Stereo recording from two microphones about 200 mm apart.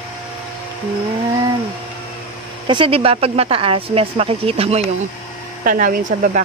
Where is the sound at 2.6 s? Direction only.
25° right (ahead or behind).